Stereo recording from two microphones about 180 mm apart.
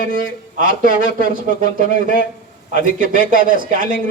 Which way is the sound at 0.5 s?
50° right (ahead or behind).